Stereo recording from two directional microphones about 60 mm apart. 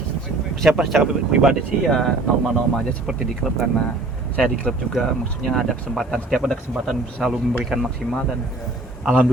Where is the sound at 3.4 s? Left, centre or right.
Centre.